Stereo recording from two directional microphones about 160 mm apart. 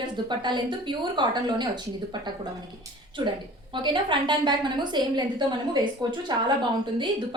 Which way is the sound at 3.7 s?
30° right (ahead or behind).